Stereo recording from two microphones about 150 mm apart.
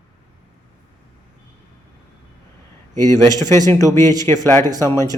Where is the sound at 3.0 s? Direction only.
55° right (ahead or behind).